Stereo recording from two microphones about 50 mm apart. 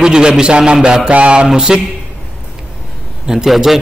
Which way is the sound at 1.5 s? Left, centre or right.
Centre.